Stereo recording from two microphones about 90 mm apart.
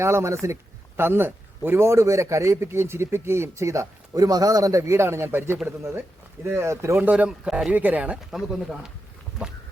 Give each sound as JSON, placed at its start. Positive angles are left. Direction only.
{"t": 0.0, "sound": "a man's voice", "side_deg": -30}
{"t": 7.0, "sound": "speech", "side_deg": -15}
{"t": 8.3, "sound": "speech", "side_deg": -5}